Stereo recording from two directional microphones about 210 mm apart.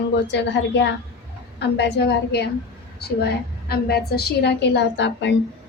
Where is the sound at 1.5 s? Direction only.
55° left (ahead or behind).